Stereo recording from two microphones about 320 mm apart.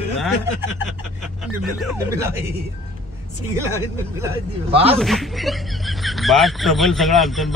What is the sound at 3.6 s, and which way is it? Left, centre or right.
Speech, centre.